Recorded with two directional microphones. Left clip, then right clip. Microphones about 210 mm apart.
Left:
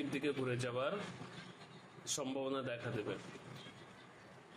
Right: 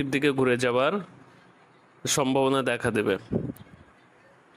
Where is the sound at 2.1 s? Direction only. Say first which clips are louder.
Right 17 dB; 50° right (ahead or behind).